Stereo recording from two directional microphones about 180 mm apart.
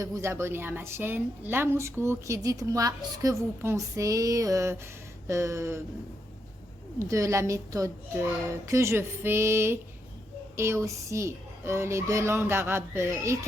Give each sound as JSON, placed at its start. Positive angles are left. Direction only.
{"t": 0.0, "sound": "a woman's voice", "side_deg": -15}
{"t": 7.0, "sound": "a woman's voice", "side_deg": -15}